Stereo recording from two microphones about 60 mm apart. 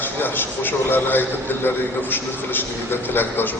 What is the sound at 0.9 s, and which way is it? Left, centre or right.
Speech, left.